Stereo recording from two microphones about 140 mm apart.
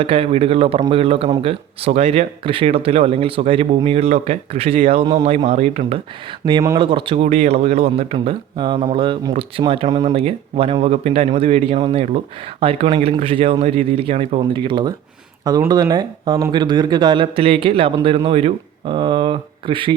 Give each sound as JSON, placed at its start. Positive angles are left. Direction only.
{"t": 0.0, "sound": "speech", "side_deg": -40}
{"t": 6.4, "sound": "speech", "side_deg": -25}